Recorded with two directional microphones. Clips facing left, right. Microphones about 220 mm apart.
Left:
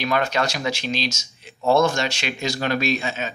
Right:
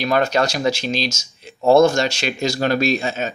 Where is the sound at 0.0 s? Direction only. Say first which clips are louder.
Right 4 dB; 40° right (ahead or behind).